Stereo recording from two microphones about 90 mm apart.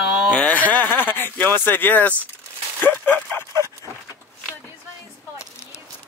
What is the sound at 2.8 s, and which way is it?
Bow-wow, 20° left (ahead or behind).